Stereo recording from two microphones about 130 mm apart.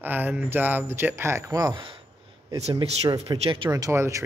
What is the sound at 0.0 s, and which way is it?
Speech, 15° right (ahead or behind).